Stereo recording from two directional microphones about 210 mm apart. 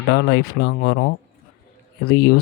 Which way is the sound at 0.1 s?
55° left (ahead or behind).